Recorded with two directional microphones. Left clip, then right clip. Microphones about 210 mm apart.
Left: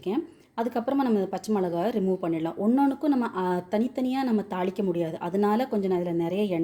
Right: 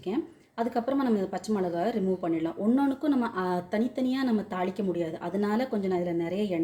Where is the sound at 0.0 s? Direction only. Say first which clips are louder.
Left 2 dB; 35° left (ahead or behind).